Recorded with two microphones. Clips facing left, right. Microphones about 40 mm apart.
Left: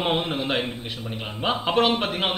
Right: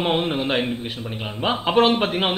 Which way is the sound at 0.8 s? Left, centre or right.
Right.